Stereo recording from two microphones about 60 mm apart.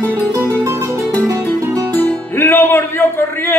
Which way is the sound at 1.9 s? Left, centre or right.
Left.